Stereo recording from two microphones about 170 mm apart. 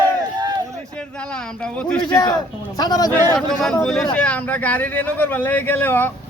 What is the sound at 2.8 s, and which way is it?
Speech, 20° left (ahead or behind).